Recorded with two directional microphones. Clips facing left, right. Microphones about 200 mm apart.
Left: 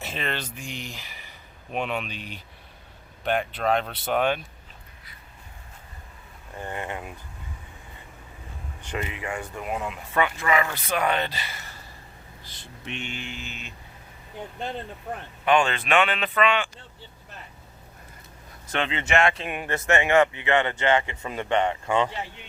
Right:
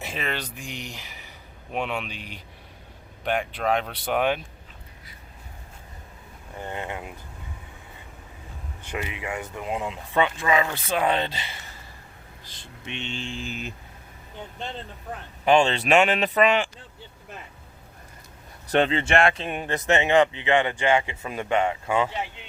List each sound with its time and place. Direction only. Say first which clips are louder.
0.0 s speech: even; 10° right (ahead or behind)
6.6 s speech: even; 15° right (ahead or behind)
8.9 s speech: even; 15° right (ahead or behind)
12.9 s speech: right 2 dB; 25° right (ahead or behind)
15.4 s speech: right 2 dB; 25° right (ahead or behind)
15.8 s speech: right 3 dB; 40° right (ahead or behind)
18.7 s speech: right 4 dB; 35° right (ahead or behind); by 22.1 s 5° right (ahead or behind)